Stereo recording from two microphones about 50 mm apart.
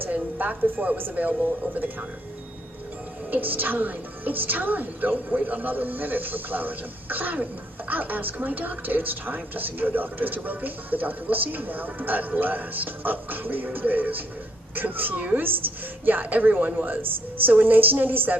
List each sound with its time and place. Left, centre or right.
0.0 s a woman's voice: right
3.3 s a woman's voice: right